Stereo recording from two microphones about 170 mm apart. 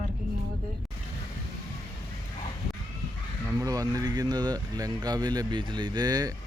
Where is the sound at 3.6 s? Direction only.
20° right (ahead or behind).